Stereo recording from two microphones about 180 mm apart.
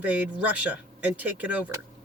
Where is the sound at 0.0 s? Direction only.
10° right (ahead or behind).